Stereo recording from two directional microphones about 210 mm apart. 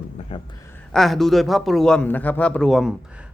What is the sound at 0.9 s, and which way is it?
A man's voice, centre (ahead or behind).